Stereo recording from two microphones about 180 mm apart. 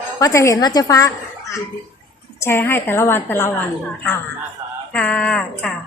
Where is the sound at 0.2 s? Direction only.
15° left (ahead or behind).